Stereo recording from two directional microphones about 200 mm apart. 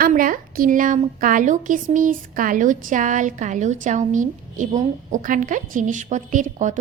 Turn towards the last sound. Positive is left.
turn(degrees=-40)  # may be behind; listen again after turning